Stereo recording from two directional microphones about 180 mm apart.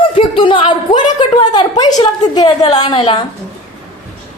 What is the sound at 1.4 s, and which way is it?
A woman's voice, 25° left (ahead or behind).